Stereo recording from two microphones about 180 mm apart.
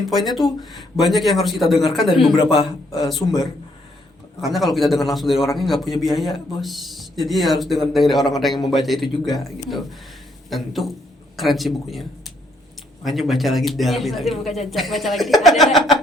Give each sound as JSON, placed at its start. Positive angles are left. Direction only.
{"t": 0.1, "sound": "a man's voice", "side_deg": 0}
{"t": 2.5, "sound": "a man's voice", "side_deg": 30}
{"t": 4.4, "sound": "a man's voice", "side_deg": 0}
{"t": 10.5, "sound": "a man's voice", "side_deg": 0}